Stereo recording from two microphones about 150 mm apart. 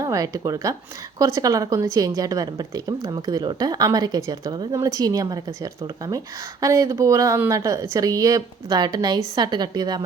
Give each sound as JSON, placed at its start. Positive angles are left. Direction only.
{"t": 0.0, "sound": "a woman's voice", "side_deg": -20}